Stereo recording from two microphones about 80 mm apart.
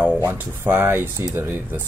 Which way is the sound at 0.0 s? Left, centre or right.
Right.